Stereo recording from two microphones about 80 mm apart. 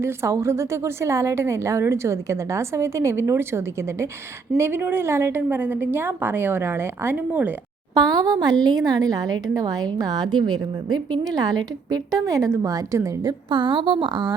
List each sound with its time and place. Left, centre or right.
0.0 s a woman's voice: right
7.9 s a woman's voice: right
10.3 s a woman's voice: right
13.5 s a woman's voice: right